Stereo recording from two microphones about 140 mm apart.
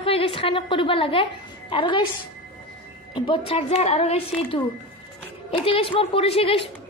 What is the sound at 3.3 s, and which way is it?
A woman's voice, 45° left (ahead or behind).